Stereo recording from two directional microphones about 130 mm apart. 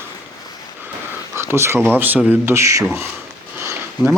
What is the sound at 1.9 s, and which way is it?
Speech, 15° right (ahead or behind).